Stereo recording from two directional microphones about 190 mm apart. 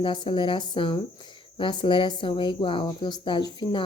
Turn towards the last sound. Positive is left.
turn(degrees=25)  # may be behind; listen again after turning